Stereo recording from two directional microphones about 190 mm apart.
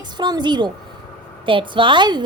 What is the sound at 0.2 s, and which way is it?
A woman's voice, 25° right (ahead or behind).